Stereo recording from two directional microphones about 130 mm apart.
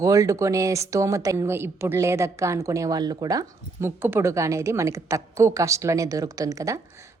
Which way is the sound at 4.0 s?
15° right (ahead or behind).